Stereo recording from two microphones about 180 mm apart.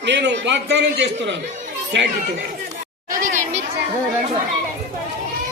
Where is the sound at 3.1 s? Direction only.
45° right (ahead or behind).